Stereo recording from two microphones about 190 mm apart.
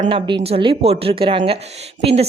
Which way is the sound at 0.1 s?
25° right (ahead or behind).